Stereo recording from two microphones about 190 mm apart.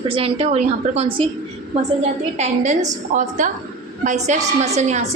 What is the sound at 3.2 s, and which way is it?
A woman's voice, 40° right (ahead or behind).